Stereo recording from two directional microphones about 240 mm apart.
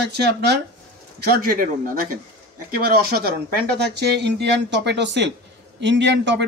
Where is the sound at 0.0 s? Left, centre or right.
Right.